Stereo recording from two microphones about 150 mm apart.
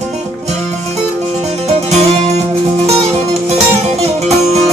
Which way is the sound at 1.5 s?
45° right (ahead or behind).